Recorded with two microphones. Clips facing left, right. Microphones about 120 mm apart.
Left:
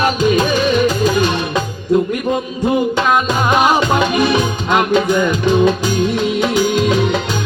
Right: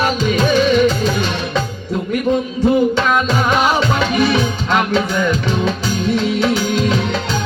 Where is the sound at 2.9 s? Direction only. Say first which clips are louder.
Left 1 dB; 15° left (ahead or behind).